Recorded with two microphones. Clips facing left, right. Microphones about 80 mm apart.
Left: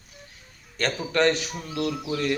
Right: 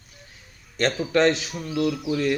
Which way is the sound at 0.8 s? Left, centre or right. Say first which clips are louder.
Right 3 dB; centre.